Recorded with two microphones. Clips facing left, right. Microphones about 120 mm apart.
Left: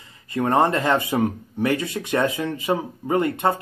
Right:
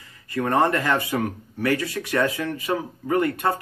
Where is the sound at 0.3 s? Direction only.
20° left (ahead or behind).